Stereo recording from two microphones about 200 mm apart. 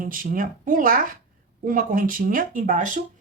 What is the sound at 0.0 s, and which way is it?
Speech, 45° right (ahead or behind).